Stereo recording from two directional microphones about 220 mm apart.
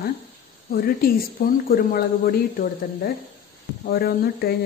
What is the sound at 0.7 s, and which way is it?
A woman's voice, 40° left (ahead or behind).